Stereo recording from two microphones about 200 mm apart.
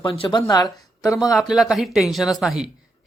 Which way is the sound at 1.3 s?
Centre (ahead or behind).